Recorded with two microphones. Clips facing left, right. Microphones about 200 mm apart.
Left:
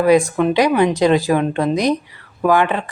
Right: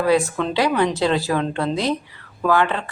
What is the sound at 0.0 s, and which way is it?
A woman's voice, 15° left (ahead or behind).